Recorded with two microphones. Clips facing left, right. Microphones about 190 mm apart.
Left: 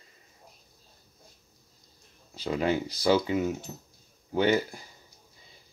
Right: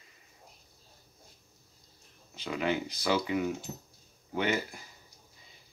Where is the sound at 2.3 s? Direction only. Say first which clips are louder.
Left 4 dB; 35° left (ahead or behind).